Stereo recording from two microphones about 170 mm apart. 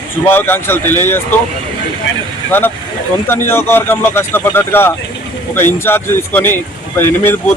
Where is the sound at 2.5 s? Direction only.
10° left (ahead or behind).